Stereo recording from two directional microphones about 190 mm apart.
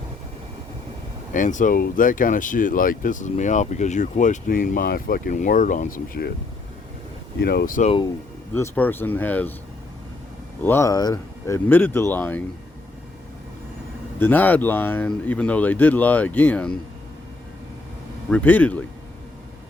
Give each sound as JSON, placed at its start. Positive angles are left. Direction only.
{"t": 1.3, "sound": "speech", "side_deg": 40}
{"t": 7.4, "sound": "speech", "side_deg": 50}
{"t": 7.9, "sound": "speech", "side_deg": 25}
{"t": 8.5, "sound": "speech", "side_deg": 10}
{"t": 10.6, "sound": "speech", "side_deg": 15}
{"t": 14.2, "sound": "speech", "side_deg": 10}
{"t": 18.3, "sound": "speech", "side_deg": 10}